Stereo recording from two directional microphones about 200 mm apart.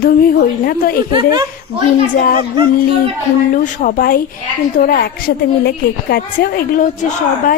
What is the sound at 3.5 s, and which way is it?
A woman's voice, 45° left (ahead or behind).